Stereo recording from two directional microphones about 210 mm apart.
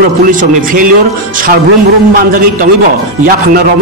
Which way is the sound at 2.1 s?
45° right (ahead or behind).